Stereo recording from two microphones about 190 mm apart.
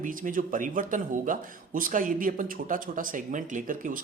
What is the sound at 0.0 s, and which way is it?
Speech, 45° right (ahead or behind).